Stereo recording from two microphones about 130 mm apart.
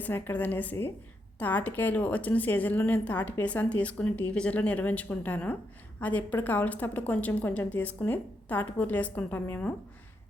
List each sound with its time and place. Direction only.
0.0 s a woman's voice: 15° left (ahead or behind)